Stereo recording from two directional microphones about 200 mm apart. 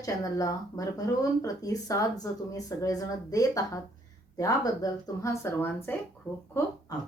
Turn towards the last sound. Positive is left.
turn(degrees=20)  # may be behind; listen again after turning